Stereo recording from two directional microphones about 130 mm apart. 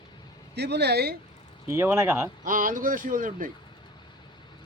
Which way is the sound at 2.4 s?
90° right.